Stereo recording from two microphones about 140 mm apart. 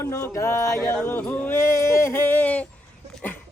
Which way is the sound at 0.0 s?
20° left (ahead or behind).